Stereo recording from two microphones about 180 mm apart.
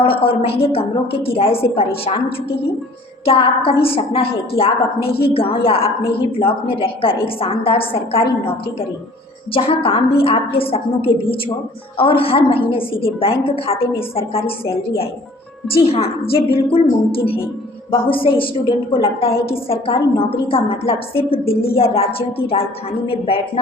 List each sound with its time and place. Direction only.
0.0 s a woman's voice: 30° left (ahead or behind)
3.2 s a woman's voice: 30° left (ahead or behind)
9.6 s a woman's voice: 30° left (ahead or behind)